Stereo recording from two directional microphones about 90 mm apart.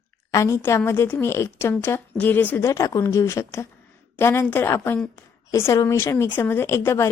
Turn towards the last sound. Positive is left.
turn(degrees=30)  # may be behind; listen again after turning